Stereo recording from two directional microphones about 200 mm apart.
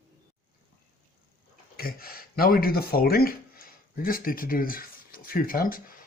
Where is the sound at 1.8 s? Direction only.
50° left (ahead or behind).